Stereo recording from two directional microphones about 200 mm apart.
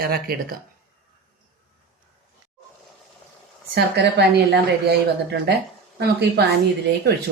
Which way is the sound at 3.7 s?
55° right (ahead or behind).